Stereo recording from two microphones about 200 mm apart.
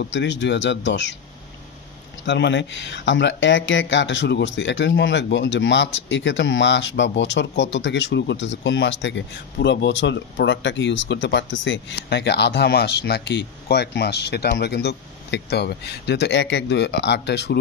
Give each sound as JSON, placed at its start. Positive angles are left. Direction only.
{"t": 0.0, "sound": "speech", "side_deg": 65}
{"t": 2.2, "sound": "speech", "side_deg": 60}